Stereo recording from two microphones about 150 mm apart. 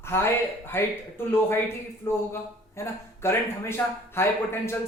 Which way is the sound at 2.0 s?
15° left (ahead or behind).